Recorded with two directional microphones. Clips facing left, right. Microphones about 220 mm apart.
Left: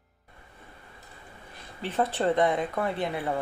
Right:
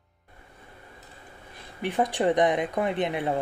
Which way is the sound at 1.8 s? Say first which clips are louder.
Right 2 dB; 15° right (ahead or behind).